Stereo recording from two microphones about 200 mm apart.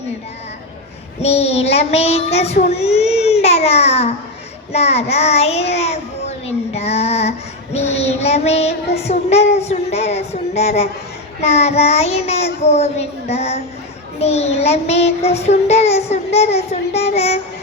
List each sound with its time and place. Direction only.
1.2 s a child's voice: 30° left (ahead or behind)